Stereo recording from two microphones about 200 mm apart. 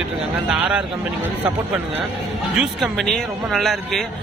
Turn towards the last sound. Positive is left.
turn(degrees=0)  # may be behind; listen again after turning